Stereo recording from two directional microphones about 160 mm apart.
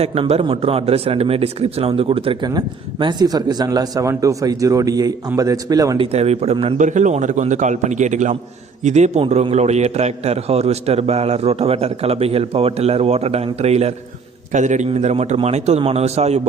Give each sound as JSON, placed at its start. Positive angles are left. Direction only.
{"t": 0.0, "sound": "a man's voice", "side_deg": -40}
{"t": 6.0, "sound": "a man's voice", "side_deg": -40}